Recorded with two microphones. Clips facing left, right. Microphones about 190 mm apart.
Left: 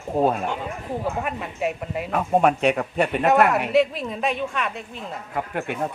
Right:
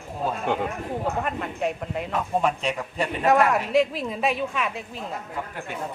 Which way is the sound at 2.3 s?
60° left (ahead or behind).